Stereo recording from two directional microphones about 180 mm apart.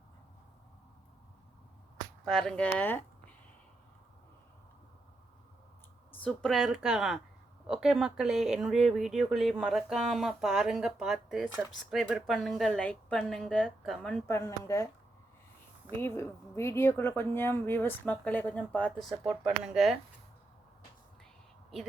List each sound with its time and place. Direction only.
2.2 s speech: 5° left (ahead or behind)
6.1 s speech: 5° left (ahead or behind)
14.3 s speech: 15° left (ahead or behind)
15.9 s speech: 10° left (ahead or behind)